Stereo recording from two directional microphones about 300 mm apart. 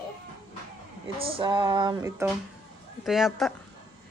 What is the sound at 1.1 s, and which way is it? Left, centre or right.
Speech, centre.